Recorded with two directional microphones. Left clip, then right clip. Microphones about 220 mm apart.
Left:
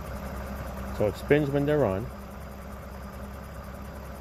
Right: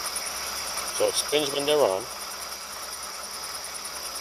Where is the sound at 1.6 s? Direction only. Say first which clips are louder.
Right 3 dB; 20° right (ahead or behind).